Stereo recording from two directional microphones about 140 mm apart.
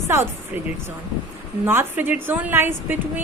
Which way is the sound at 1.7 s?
15° right (ahead or behind).